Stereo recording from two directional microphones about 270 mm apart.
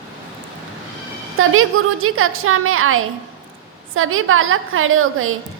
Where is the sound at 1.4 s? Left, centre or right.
Right.